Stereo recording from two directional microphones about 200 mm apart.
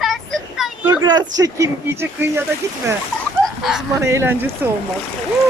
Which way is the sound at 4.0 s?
15° right (ahead or behind).